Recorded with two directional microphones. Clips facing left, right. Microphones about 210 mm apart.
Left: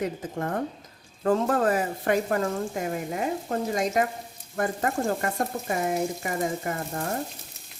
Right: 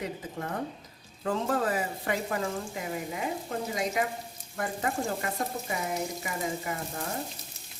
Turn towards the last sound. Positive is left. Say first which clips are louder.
# left 4 dB
turn(degrees=50)  # may be behind; listen again after turning